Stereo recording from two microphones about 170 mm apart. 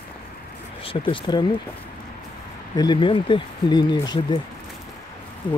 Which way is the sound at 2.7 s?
25° left (ahead or behind).